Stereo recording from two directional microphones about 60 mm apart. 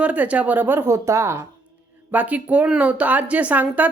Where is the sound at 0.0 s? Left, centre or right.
Right.